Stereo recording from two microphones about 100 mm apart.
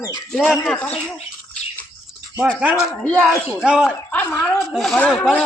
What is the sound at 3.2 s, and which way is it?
Speech, 15° right (ahead or behind).